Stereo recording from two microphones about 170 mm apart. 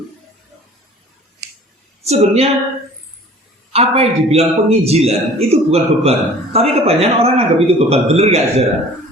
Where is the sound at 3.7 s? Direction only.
35° right (ahead or behind).